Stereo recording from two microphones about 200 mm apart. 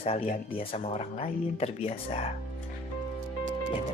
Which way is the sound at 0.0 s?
30° left (ahead or behind).